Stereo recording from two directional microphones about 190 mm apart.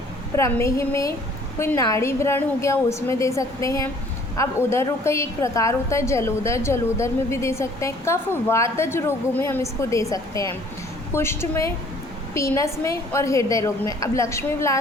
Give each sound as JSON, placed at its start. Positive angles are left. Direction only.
{"t": 0.3, "sound": "a woman's voice", "side_deg": 15}